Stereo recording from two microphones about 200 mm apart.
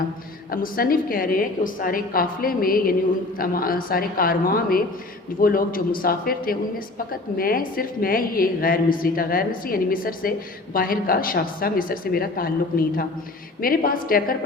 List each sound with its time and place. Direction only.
0.5 s a woman's voice: 45° left (ahead or behind)